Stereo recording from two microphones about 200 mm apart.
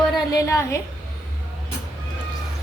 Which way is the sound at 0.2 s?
15° left (ahead or behind).